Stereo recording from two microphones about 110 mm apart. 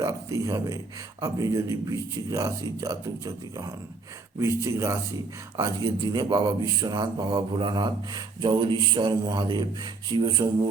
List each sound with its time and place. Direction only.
0.0 s speech: 30° right (ahead or behind)
5.5 s speech: 40° right (ahead or behind)